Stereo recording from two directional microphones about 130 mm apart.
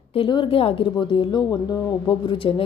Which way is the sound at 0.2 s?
40° left (ahead or behind).